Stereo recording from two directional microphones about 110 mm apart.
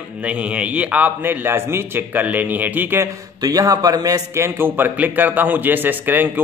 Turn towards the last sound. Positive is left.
turn(degrees=-20)  # may be behind; listen again after turning